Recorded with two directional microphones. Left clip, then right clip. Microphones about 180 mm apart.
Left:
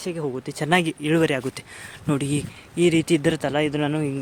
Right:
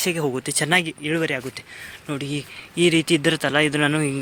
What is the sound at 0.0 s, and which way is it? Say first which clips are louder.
Speech: right 5 dB; 20° right (ahead or behind).